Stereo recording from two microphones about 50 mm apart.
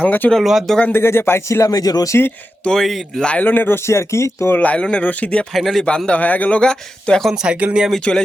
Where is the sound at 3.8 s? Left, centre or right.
Left.